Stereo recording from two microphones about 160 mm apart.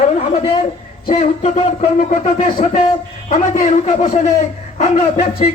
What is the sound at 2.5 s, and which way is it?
Speech, 35° left (ahead or behind).